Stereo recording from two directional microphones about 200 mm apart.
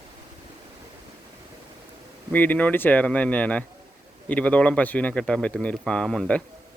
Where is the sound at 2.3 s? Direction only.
10° left (ahead or behind).